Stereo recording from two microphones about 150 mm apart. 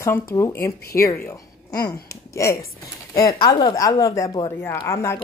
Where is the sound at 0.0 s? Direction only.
20° left (ahead or behind).